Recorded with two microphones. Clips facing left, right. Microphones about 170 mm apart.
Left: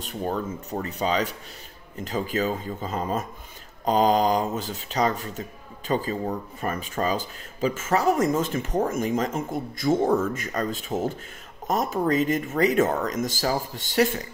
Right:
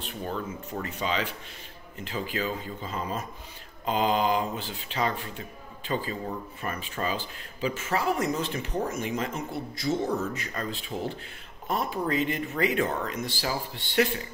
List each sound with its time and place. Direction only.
0.0 s speech: 45° left (ahead or behind)